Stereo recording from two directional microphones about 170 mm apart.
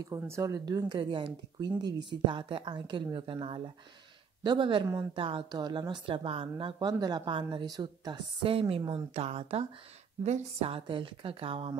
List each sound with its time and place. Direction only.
0.0 s a woman's voice: 20° right (ahead or behind); by 11.8 s 35° right (ahead or behind)